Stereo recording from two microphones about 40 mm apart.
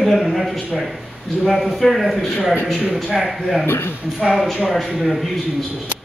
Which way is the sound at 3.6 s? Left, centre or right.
Left.